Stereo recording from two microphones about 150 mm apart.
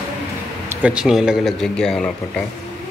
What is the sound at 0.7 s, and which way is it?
Speech, 10° right (ahead or behind).